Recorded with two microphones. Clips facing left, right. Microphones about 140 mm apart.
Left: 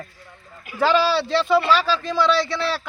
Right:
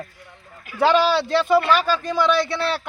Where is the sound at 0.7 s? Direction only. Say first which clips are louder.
Right 2 dB; 10° left (ahead or behind).